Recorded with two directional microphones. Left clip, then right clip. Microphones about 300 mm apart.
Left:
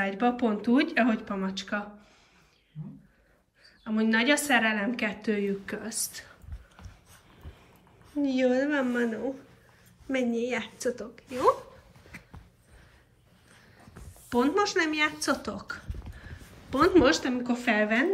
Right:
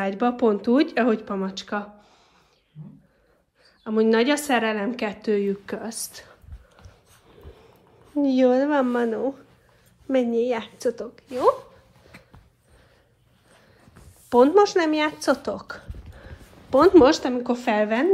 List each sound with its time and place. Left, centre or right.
0.0 s a woman's voice: centre
3.8 s a woman's voice: centre
8.2 s a woman's voice: centre
9.0 s speech: right
10.3 s a woman's voice: centre
14.3 s speech: centre